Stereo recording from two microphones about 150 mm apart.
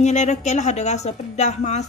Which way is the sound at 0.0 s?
50° left (ahead or behind).